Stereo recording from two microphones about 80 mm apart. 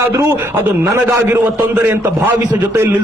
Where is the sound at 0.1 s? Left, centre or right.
Right.